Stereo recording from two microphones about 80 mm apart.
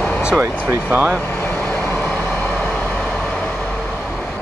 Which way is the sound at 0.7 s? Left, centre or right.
Right.